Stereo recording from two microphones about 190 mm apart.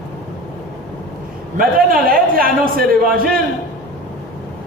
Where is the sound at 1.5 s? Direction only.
50° right (ahead or behind).